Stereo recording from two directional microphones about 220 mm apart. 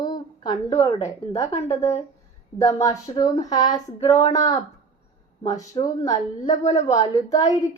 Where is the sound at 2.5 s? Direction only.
15° left (ahead or behind).